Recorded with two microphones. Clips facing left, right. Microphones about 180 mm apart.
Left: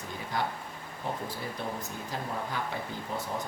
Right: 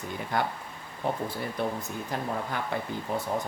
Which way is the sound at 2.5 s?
60° right (ahead or behind).